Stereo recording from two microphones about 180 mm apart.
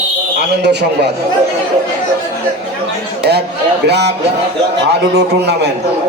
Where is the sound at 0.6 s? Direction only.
70° right (ahead or behind).